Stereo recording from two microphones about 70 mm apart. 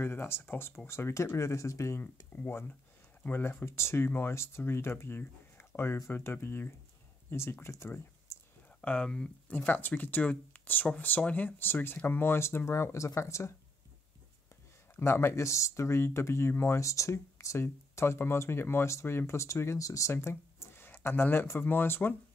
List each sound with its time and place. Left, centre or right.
0.0 s speech: left
2.3 s speech: left
8.8 s speech: centre
9.7 s speech: left
15.0 s speech: left